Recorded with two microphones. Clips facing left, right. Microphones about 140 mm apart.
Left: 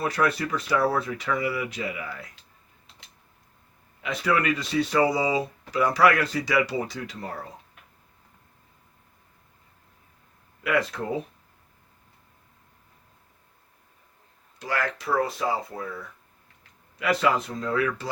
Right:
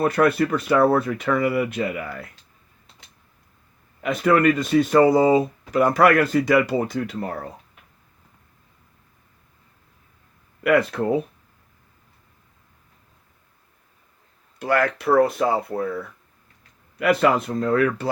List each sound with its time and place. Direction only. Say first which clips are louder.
0.0 s speech: right 7 dB; 55° right (ahead or behind)
4.0 s speech: right 7 dB; 50° right (ahead or behind)
10.6 s speech: right 7 dB; 60° right (ahead or behind)
14.6 s speech: right 8 dB; 55° right (ahead or behind)